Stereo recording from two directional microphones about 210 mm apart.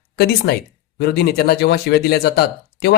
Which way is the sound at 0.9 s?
50° left (ahead or behind).